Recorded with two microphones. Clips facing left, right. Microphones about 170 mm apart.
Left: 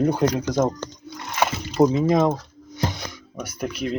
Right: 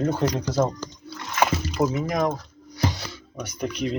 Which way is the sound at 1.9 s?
25° left (ahead or behind).